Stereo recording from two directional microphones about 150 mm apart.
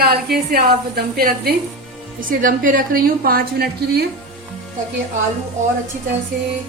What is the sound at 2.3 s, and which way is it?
A woman's voice, 65° right (ahead or behind).